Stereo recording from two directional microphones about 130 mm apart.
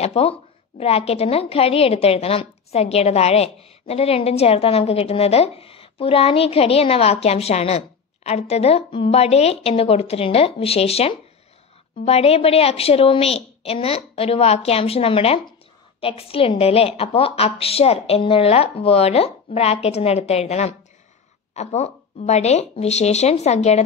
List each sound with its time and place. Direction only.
0.0 s a woman's voice: 50° left (ahead or behind)